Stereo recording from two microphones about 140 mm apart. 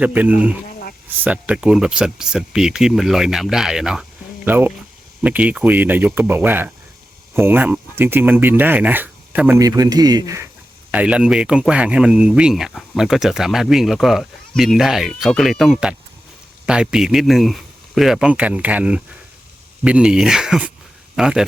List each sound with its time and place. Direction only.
0.0 s speech: 10° right (ahead or behind)
4.4 s speech: 15° right (ahead or behind)
9.6 s speech: 25° right (ahead or behind)
10.9 s speech: 10° right (ahead or behind)